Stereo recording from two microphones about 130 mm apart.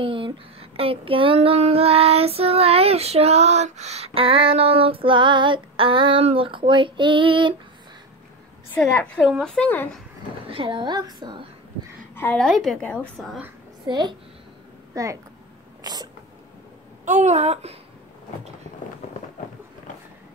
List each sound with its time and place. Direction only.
0.0 s child singing: 40° right (ahead or behind)
8.7 s a woman's voice: 10° left (ahead or behind)
10.5 s a woman's voice: 40° right (ahead or behind)
12.4 s a woman's voice: centre (ahead or behind)
13.8 s a woman's voice: 35° right (ahead or behind)
15.8 s a sound: 30° right (ahead or behind)
17.0 s speech: 65° right (ahead or behind)